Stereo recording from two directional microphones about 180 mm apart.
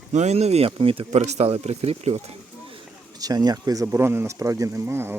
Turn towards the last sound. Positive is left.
turn(degrees=-15)  # may be behind; listen again after turning